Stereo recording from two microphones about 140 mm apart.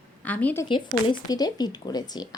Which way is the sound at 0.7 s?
35° left (ahead or behind).